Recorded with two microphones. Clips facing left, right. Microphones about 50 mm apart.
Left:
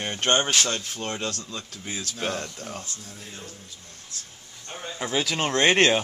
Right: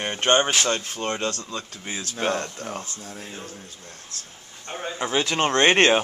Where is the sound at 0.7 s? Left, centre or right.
Right.